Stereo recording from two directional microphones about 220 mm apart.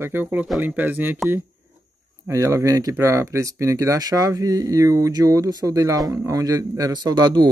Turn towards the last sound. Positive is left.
turn(degrees=-20)  # may be behind; listen again after turning